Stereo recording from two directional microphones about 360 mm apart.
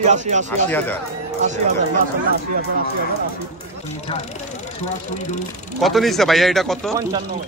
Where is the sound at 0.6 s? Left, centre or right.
Centre.